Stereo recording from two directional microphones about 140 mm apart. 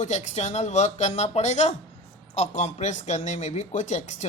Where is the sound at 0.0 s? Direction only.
55° left (ahead or behind).